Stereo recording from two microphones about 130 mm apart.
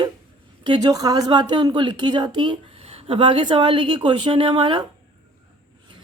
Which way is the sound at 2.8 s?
50° right (ahead or behind).